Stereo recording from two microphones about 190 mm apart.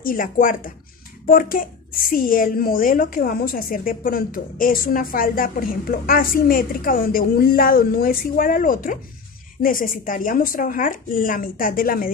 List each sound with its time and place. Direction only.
0.0 s a woman's voice: 45° left (ahead or behind)